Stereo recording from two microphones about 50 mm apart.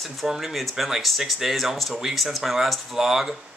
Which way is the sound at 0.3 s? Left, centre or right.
Centre.